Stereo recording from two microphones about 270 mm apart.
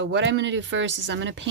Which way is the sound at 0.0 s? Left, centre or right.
Right.